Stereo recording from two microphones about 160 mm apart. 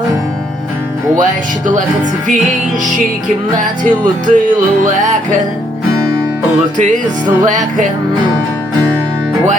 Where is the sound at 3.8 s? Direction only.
55° right (ahead or behind).